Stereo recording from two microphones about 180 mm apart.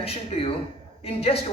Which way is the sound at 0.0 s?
35° left (ahead or behind).